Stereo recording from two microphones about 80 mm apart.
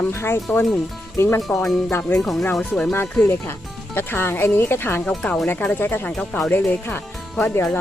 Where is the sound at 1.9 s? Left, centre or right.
Left.